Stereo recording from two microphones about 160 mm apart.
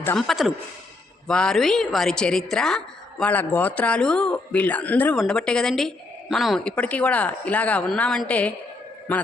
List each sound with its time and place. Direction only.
0.2 s a woman's voice: centre (ahead or behind)